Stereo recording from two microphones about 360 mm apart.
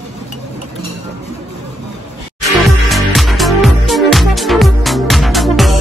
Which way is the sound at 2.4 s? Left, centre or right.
Centre.